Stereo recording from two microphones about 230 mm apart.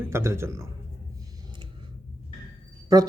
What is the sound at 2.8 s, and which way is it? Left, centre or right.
Speech, centre.